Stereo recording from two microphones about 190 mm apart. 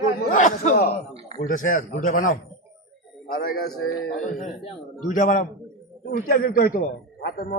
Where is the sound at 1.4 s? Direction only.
45° left (ahead or behind).